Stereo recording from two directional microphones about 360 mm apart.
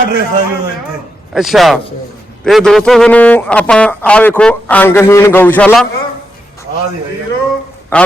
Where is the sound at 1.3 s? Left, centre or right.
Centre.